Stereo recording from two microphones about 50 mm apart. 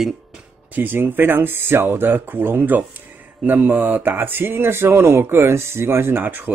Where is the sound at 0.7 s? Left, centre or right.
Right.